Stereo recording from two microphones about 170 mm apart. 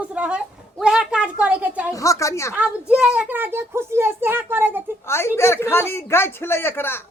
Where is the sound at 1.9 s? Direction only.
20° left (ahead or behind).